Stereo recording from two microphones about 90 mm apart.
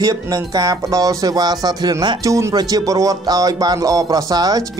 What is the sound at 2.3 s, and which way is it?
Speech, 35° right (ahead or behind).